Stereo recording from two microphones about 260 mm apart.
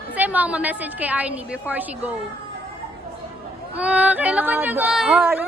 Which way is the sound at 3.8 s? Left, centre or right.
Centre.